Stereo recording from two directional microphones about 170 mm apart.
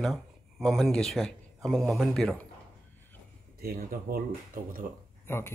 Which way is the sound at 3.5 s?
60° right (ahead or behind).